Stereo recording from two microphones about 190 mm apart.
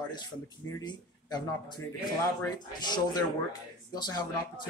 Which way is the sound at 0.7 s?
20° left (ahead or behind).